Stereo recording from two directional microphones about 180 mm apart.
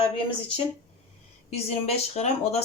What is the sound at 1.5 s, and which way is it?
Speech, 35° left (ahead or behind).